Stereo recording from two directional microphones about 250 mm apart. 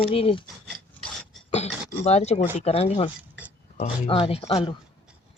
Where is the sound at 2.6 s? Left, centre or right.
Left.